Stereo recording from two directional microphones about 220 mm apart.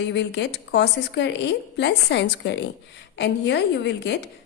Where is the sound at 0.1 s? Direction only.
50° left (ahead or behind).